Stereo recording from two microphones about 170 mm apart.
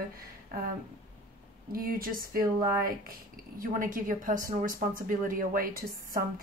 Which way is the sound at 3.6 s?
55° right (ahead or behind).